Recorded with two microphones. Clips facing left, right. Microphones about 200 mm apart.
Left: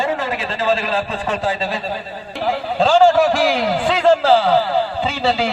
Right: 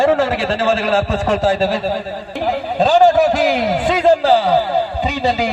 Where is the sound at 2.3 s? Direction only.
15° right (ahead or behind).